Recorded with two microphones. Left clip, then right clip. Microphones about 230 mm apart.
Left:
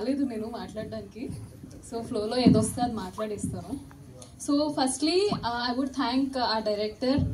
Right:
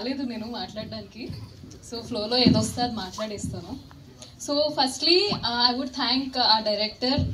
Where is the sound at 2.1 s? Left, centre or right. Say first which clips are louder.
Right 2 dB; right.